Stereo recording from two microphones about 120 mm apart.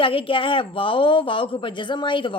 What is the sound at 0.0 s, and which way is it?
A woman's voice, 45° left (ahead or behind).